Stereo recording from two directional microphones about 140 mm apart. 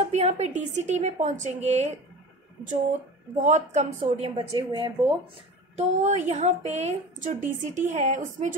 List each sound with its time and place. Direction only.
0.0 s a woman's voice: 50° right (ahead or behind)
3.3 s a woman's voice: 55° right (ahead or behind)
4.0 s a woman's voice: 40° right (ahead or behind)
5.8 s a woman's voice: 55° right (ahead or behind)